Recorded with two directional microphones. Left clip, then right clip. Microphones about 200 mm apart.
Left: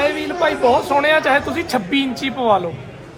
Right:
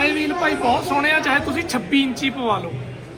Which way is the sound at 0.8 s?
40° left (ahead or behind).